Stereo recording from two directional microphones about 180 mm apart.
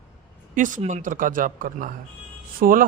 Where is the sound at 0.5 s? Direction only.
45° right (ahead or behind).